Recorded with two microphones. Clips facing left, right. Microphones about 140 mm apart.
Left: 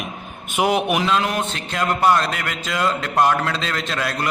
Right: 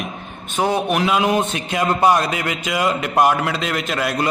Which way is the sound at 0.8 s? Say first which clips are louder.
Right 1 dB; centre (ahead or behind).